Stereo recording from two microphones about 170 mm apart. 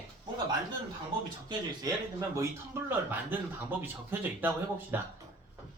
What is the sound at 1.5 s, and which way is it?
A man's voice, 20° right (ahead or behind).